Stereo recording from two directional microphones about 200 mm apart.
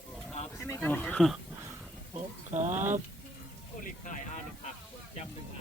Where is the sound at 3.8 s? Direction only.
40° left (ahead or behind).